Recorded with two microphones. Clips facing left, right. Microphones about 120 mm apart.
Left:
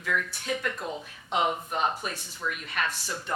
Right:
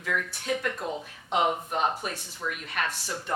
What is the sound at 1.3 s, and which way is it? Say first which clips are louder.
A woman's voice: right 1 dB; 50° right (ahead or behind).